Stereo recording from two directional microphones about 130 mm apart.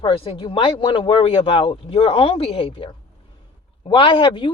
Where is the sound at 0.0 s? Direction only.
40° left (ahead or behind).